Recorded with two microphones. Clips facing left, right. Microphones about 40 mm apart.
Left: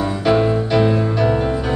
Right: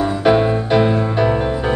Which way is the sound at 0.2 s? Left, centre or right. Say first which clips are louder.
Right 1 dB; right.